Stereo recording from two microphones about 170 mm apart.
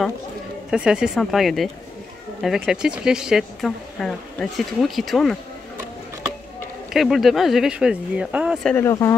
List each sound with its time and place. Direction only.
0.7 s speech: 5° right (ahead or behind)
6.9 s speech: centre (ahead or behind)
8.7 s speech: 15° left (ahead or behind)